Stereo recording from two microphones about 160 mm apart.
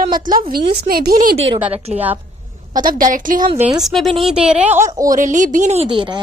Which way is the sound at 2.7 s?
55° right (ahead or behind).